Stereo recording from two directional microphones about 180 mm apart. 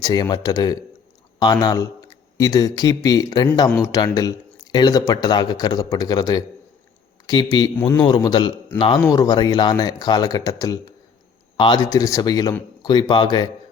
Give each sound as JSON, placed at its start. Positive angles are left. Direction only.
{"t": 0.0, "sound": "speech", "side_deg": 20}
{"t": 7.5, "sound": "speech", "side_deg": 20}